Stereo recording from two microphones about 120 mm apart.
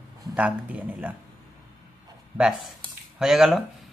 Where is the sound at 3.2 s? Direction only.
5° right (ahead or behind).